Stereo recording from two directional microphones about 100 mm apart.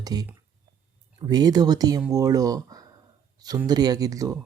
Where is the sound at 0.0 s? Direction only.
40° right (ahead or behind).